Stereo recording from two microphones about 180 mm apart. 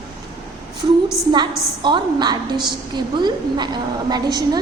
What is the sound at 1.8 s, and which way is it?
A woman's voice, 25° right (ahead or behind).